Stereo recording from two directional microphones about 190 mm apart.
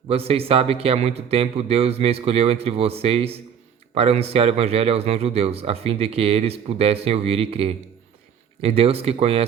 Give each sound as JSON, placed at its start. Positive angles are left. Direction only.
{"t": 0.1, "sound": "a man's voice", "side_deg": -30}